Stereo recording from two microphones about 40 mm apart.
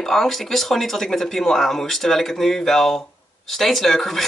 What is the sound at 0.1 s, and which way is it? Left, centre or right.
Speech, centre.